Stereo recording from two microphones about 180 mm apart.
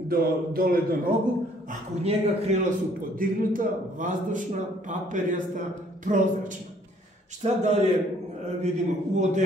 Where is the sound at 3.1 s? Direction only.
50° right (ahead or behind).